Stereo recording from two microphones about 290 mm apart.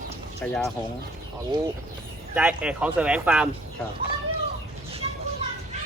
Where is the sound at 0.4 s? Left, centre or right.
Centre.